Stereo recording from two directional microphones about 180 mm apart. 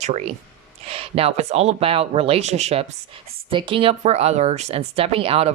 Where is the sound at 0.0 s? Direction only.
35° right (ahead or behind).